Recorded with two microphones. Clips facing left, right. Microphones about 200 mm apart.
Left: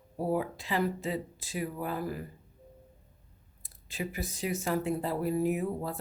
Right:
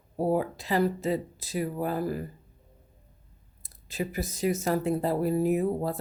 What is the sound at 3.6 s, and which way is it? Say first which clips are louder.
Speech: right 4 dB; 40° right (ahead or behind).